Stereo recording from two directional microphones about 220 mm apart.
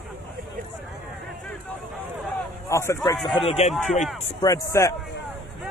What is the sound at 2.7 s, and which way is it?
Speech, 15° left (ahead or behind).